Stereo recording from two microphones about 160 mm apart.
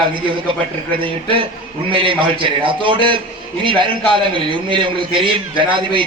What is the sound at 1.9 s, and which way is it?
A man's voice, 30° right (ahead or behind).